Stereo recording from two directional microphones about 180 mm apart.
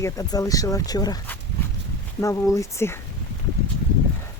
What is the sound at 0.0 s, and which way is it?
Speech, 20° left (ahead or behind).